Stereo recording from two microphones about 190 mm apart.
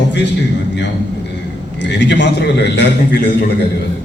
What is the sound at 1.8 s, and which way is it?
A man's voice, 65° left (ahead or behind).